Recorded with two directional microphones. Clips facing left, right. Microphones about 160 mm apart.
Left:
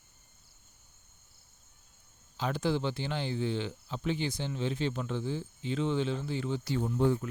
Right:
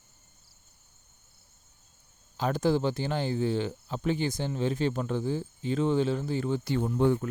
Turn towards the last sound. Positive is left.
turn(degrees=-60)  # may be behind; listen again after turning